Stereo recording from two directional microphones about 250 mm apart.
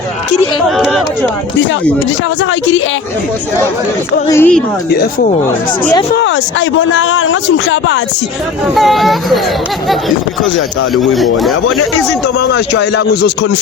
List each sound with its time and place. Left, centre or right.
0.8 s speech: centre
2.4 s speech: left
4.3 s speech: centre
4.9 s speech: left
5.8 s speech: centre
6.1 s speech: left
8.7 s speech: centre
10.9 s speech: centre
12.4 s speech: left